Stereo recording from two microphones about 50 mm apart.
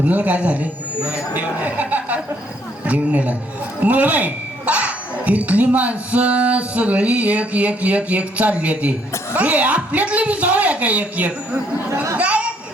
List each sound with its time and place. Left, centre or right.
0.0 s a woman's voice: right
12.1 s chatter: right